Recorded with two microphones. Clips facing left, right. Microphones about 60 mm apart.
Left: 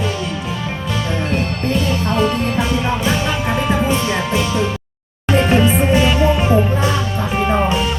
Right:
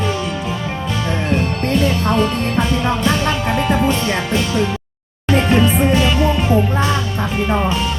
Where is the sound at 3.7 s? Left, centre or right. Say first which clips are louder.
Even; centre.